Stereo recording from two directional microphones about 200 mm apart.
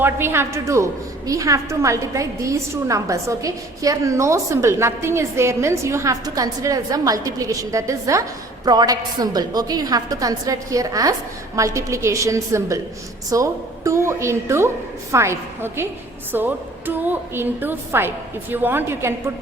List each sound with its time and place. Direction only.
0.0 s a woman's voice: 10° right (ahead or behind)